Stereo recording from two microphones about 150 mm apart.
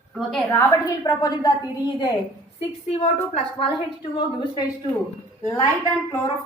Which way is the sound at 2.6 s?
45° left (ahead or behind).